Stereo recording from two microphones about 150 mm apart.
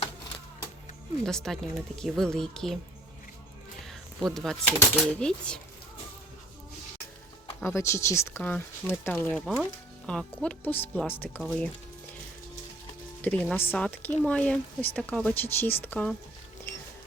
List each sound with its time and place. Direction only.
1.2 s speech: 5° left (ahead or behind)
3.8 s a sound: centre (ahead or behind)
4.8 s speech: 5° left (ahead or behind)
7.6 s a woman's voice: 20° left (ahead or behind)
13.2 s a woman's voice: 10° left (ahead or behind)